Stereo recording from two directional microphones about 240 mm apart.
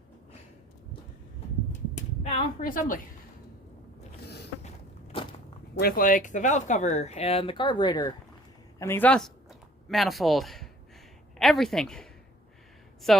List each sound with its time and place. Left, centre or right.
2.2 s a woman's voice: left
5.8 s speech: left; by 12.0 s centre
13.1 s speech: centre